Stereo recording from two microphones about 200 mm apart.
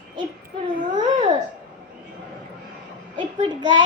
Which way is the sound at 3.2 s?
25° right (ahead or behind).